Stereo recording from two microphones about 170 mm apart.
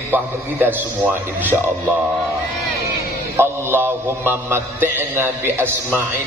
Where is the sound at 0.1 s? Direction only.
10° right (ahead or behind).